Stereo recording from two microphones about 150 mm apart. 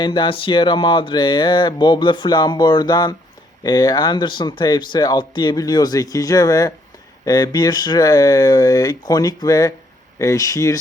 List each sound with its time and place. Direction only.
0.0 s speech: 30° left (ahead or behind)